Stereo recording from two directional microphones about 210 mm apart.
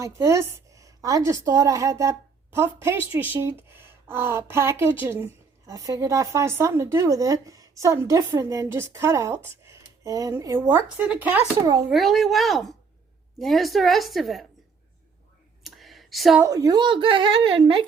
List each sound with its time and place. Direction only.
0.0 s a woman's voice: 15° right (ahead or behind)
15.6 s a sound: centre (ahead or behind)
16.5 s speech: 15° right (ahead or behind)